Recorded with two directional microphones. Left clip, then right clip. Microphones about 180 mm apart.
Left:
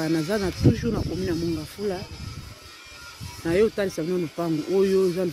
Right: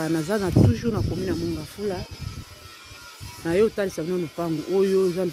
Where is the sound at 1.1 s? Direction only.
30° right (ahead or behind).